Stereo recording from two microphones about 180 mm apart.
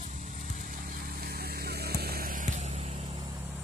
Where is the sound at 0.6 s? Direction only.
50° right (ahead or behind).